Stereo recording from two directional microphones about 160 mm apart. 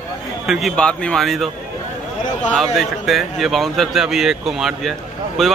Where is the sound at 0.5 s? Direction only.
Centre (ahead or behind).